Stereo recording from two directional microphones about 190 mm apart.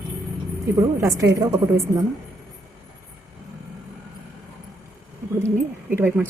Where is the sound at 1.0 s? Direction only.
15° right (ahead or behind).